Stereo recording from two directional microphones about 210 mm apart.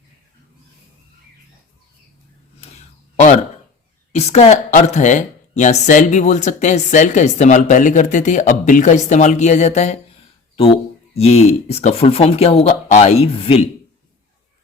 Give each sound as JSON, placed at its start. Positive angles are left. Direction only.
{"t": 4.1, "sound": "speech", "side_deg": 30}